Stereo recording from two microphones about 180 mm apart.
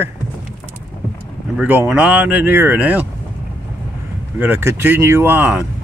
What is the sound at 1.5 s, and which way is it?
Speech, 10° right (ahead or behind).